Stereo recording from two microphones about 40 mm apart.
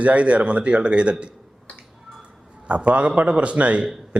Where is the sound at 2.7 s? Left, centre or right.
Right.